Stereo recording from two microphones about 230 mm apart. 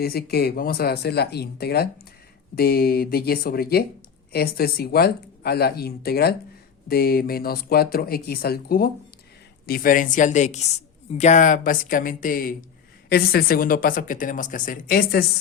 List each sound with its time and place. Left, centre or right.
0.0 s speech: left